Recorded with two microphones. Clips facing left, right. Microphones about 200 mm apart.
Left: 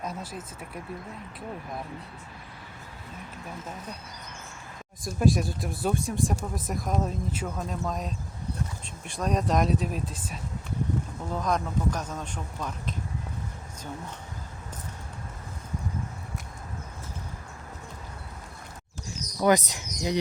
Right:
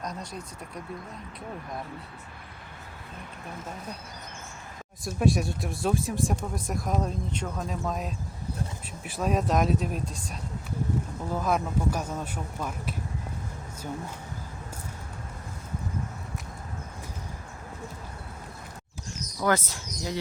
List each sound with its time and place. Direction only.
0.0 s speech: 5° left (ahead or behind)
5.0 s speech: centre (ahead or behind)
19.4 s speech: 15° left (ahead or behind)